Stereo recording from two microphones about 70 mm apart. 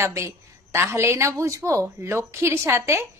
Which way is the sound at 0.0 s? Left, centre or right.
Right.